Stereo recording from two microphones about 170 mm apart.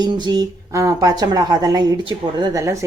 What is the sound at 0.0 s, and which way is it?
Speech, 25° right (ahead or behind).